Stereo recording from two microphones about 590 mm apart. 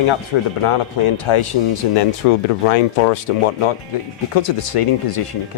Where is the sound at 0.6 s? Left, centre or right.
Left.